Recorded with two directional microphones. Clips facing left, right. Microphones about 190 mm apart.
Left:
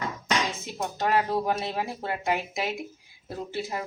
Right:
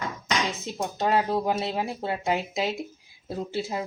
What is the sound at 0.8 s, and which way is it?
Speech, 20° right (ahead or behind).